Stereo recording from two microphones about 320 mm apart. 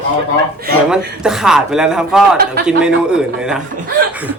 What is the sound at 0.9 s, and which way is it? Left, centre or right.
A man's voice, centre.